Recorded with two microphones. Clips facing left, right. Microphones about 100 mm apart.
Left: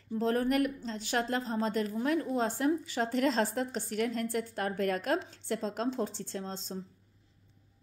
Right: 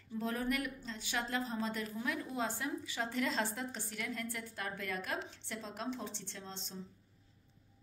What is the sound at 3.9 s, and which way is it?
A woman's voice, 55° left (ahead or behind).